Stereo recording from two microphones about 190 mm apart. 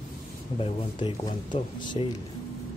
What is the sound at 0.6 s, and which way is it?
Speech, 25° left (ahead or behind).